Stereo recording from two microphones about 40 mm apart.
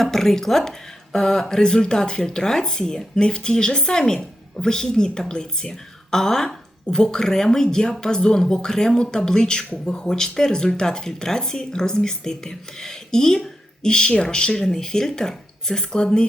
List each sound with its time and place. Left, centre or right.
0.0 s a woman's voice: centre